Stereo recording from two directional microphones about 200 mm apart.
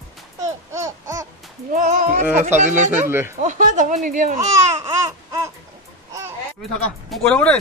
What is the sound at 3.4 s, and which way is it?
Speech, 40° right (ahead or behind).